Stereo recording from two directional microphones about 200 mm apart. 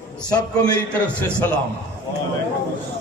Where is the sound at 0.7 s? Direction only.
5° left (ahead or behind).